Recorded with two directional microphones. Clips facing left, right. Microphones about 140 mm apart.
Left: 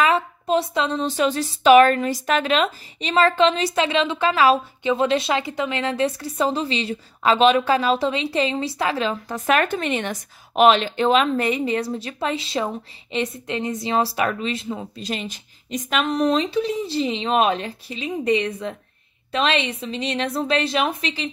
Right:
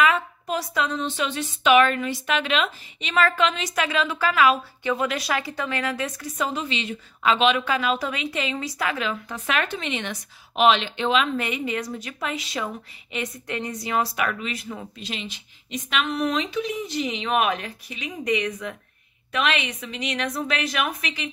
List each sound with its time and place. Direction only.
0.0 s a woman's voice: 30° left (ahead or behind)
15.0 s a woman's voice: 45° left (ahead or behind)